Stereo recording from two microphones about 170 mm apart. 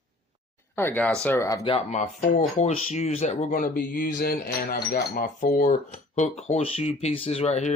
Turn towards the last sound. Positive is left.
turn(degrees=40)  # may be behind; listen again after turning